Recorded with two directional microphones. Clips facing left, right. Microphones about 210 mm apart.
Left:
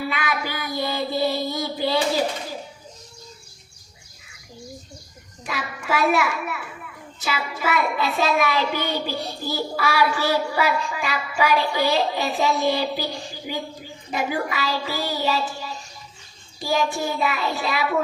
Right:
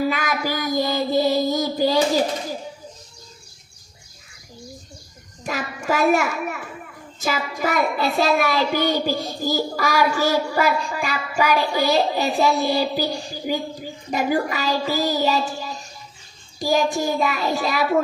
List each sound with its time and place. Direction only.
0.1 s child singing: 40° right (ahead or behind)
5.4 s a child's voice: 40° right (ahead or behind)
16.6 s a child's voice: 40° right (ahead or behind)